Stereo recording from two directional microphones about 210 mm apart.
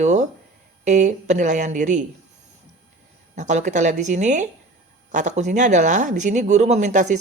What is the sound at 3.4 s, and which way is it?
Speech, 35° right (ahead or behind).